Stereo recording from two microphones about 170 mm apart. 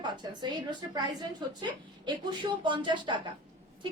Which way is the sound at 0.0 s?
25° right (ahead or behind).